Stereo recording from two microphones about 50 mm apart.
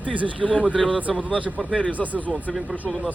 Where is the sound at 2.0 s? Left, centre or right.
Centre.